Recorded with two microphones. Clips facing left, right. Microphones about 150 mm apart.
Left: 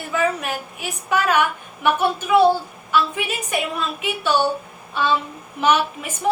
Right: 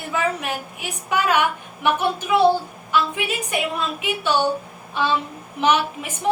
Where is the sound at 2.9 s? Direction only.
15° right (ahead or behind).